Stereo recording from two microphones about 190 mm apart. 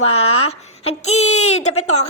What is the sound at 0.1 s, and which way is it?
A woman's voice, 30° left (ahead or behind).